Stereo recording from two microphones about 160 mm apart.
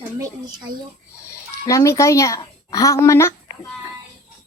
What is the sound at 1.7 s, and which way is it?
Speech, 20° left (ahead or behind).